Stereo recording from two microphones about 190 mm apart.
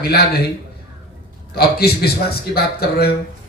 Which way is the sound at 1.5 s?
55° left (ahead or behind).